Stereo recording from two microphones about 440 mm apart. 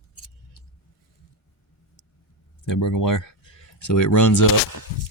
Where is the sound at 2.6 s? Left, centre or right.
Left.